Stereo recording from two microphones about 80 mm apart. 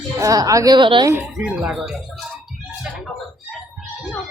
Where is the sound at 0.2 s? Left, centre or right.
Right.